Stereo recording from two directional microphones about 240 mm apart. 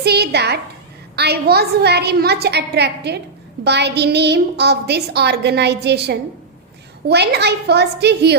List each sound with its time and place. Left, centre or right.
0.0 s a woman's voice: right